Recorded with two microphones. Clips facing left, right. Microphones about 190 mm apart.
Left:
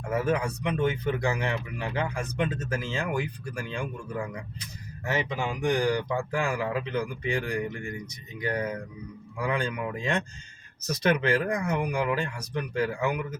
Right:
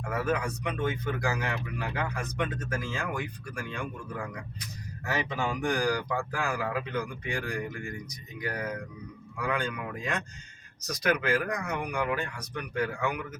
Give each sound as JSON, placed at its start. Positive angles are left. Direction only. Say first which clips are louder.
{"t": 0.1, "sound": "speech", "louder": "left 3 dB", "side_deg": 25}
{"t": 9.5, "sound": "speech", "louder": "left 2 dB", "side_deg": 25}